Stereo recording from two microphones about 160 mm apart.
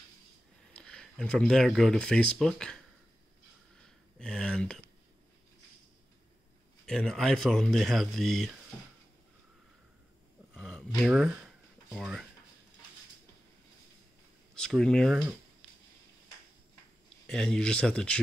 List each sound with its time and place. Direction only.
0.7 s speech: 5° left (ahead or behind)
3.7 s a sound: 5° left (ahead or behind)
6.9 s speech: 5° left (ahead or behind)
10.5 s a sound: centre (ahead or behind)
14.5 s speech: 5° left (ahead or behind)
17.3 s speech: 5° left (ahead or behind)